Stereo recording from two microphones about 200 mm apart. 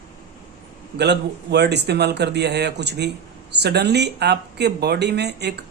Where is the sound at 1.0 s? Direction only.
55° right (ahead or behind).